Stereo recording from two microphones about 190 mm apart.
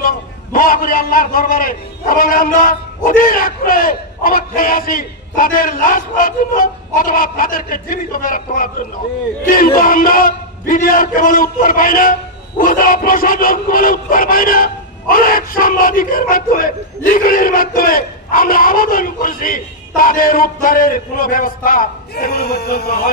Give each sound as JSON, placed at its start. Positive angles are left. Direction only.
{"t": 0.0, "sound": "a man's voice", "side_deg": 50}